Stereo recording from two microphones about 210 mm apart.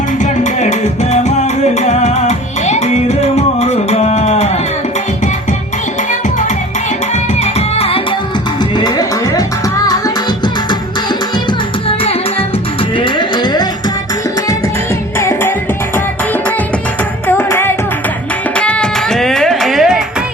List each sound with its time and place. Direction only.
0.2 s music: 35° left (ahead or behind)
7.4 s music: 30° left (ahead or behind)
13.0 s music: 20° left (ahead or behind)
15.2 s music: 10° left (ahead or behind)
17.2 s music: 10° left (ahead or behind)